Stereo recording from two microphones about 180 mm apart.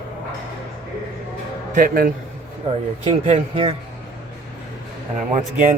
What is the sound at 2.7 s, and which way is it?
Speech, 35° right (ahead or behind).